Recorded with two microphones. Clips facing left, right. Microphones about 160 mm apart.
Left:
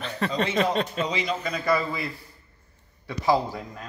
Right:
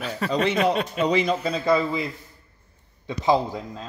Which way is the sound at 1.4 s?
25° right (ahead or behind).